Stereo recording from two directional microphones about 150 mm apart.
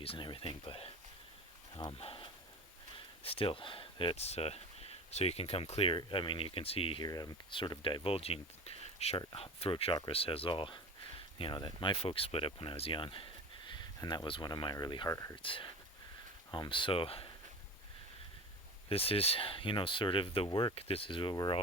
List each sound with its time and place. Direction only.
0.0 s speech: 35° left (ahead or behind)
15.4 s speech: 35° left (ahead or behind)
18.9 s speech: 40° left (ahead or behind)